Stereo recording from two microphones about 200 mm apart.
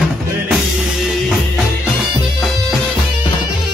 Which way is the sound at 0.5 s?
Centre (ahead or behind).